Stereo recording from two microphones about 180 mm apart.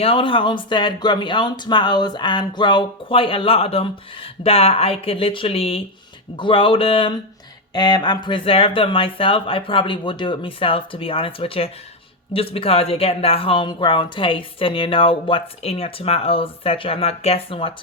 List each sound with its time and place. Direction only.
0.0 s speech: 30° left (ahead or behind)